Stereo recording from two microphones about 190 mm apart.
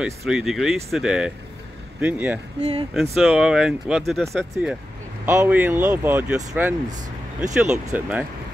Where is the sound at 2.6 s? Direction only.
35° right (ahead or behind).